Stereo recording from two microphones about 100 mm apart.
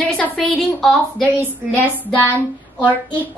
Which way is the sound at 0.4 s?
Centre (ahead or behind).